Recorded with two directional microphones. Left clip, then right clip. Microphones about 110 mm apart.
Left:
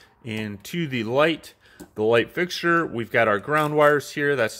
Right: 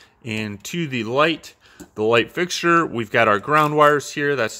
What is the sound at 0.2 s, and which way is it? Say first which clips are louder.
Speech: right 4 dB; 15° right (ahead or behind).